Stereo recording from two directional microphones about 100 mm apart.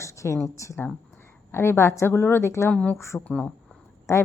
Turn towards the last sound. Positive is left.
turn(degrees=30)  # may be behind; listen again after turning